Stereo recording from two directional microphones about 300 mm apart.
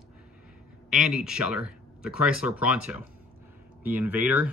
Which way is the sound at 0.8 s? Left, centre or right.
Centre.